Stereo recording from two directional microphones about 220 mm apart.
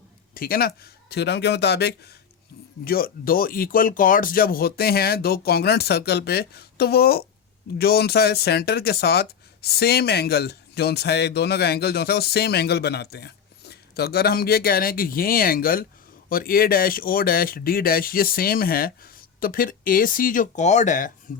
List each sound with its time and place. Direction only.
0.3 s speech: 40° left (ahead or behind)